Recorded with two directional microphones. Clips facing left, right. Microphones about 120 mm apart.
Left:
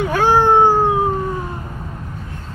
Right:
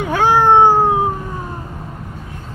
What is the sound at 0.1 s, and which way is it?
Cat, 20° right (ahead or behind).